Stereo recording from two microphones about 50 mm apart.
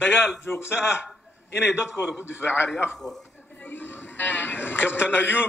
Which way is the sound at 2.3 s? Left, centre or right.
Left.